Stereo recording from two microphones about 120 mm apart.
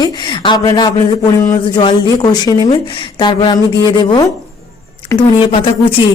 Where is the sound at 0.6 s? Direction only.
30° left (ahead or behind).